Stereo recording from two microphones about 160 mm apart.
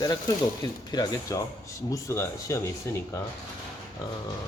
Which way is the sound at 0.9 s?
25° left (ahead or behind).